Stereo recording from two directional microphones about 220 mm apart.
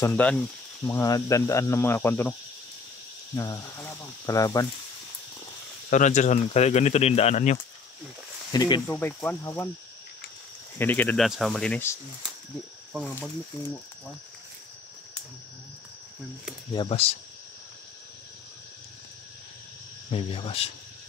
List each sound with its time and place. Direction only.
0.0 s speech: 5° left (ahead or behind)
0.8 s speech: 15° left (ahead or behind)
3.3 s speech: 15° left (ahead or behind)
5.9 s speech: 35° left (ahead or behind)
8.5 s speech: 20° left (ahead or behind)
8.8 s speech: 10° left (ahead or behind)
10.8 s speech: 10° left (ahead or behind)
16.7 s speech: 25° left (ahead or behind)
20.1 s speech: 25° left (ahead or behind)